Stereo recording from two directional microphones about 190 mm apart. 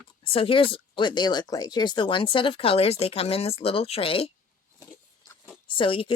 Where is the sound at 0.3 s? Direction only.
30° left (ahead or behind).